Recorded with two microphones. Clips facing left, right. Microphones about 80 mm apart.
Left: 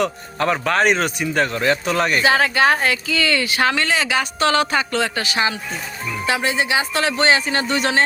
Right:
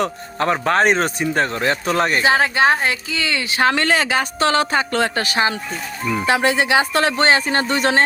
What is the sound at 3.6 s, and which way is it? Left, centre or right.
Speech, right.